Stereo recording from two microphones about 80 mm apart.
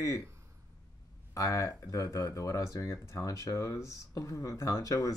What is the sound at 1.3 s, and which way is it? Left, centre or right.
Speech, left.